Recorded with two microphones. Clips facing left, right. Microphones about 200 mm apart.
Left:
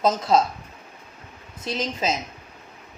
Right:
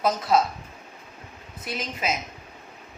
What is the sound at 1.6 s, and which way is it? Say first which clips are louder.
Speech: left 4 dB; 25° left (ahead or behind).